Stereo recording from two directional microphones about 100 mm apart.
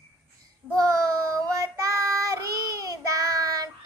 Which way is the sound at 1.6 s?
30° right (ahead or behind).